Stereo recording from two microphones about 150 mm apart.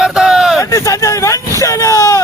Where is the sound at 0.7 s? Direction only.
20° left (ahead or behind).